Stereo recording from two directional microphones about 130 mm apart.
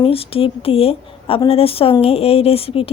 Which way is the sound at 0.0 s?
45° left (ahead or behind).